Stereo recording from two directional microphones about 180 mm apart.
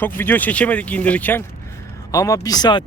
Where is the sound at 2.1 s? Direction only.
20° left (ahead or behind).